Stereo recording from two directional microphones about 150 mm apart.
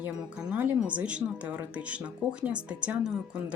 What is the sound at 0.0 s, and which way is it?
Speech, 10° right (ahead or behind).